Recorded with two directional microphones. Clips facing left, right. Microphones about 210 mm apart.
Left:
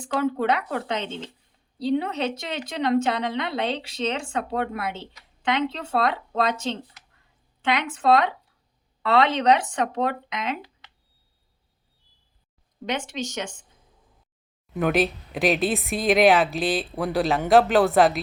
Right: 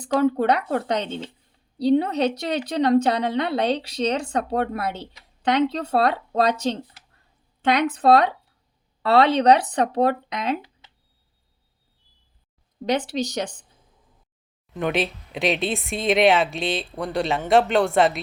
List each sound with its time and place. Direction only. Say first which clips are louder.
0.0 s a woman's voice: right 4 dB; 40° right (ahead or behind)
12.8 s a woman's voice: right 6 dB; 35° right (ahead or behind)
14.7 s speech: left 2 dB; 5° left (ahead or behind)